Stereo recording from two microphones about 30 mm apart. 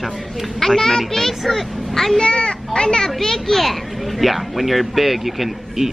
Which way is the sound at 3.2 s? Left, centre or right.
Centre.